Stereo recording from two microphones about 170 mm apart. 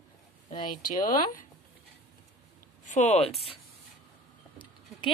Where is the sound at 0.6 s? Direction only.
55° left (ahead or behind).